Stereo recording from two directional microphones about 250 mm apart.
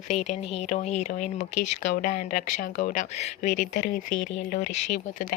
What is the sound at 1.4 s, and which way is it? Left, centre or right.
Speech, left.